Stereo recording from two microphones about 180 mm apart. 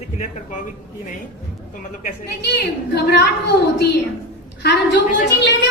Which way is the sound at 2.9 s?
60° left (ahead or behind).